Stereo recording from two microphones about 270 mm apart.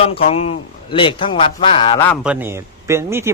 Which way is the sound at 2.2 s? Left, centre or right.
Centre.